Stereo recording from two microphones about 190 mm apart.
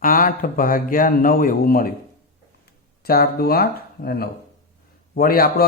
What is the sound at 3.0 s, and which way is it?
A man's voice, 55° left (ahead or behind).